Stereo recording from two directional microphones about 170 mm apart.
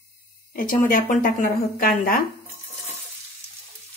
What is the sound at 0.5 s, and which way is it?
Speech, 55° left (ahead or behind).